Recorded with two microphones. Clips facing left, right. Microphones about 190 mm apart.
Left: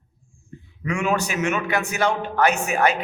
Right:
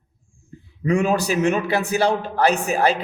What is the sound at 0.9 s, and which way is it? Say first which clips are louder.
Speech: right 4 dB; 35° right (ahead or behind).